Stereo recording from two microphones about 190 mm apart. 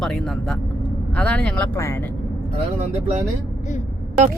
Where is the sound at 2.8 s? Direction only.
40° right (ahead or behind).